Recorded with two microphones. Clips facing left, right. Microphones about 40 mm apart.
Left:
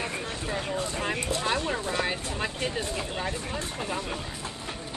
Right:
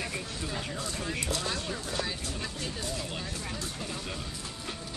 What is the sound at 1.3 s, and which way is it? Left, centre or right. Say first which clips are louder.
Speech: left 6 dB; left.